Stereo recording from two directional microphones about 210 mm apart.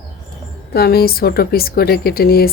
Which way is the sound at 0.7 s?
45° left (ahead or behind).